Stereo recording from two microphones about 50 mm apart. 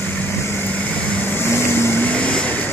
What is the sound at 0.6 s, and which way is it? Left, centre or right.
Vehicle, left.